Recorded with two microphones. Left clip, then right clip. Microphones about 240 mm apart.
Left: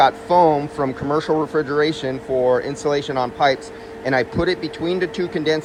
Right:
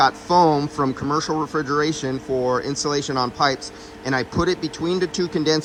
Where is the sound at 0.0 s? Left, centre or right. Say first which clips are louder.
Left 2 dB; centre.